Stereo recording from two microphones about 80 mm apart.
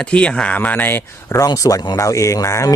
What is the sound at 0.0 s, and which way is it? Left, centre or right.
Speech, centre.